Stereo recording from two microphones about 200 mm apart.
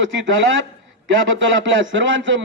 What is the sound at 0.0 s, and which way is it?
Speech, 65° right (ahead or behind).